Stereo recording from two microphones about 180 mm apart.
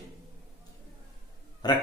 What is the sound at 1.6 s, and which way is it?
Speech, 25° left (ahead or behind).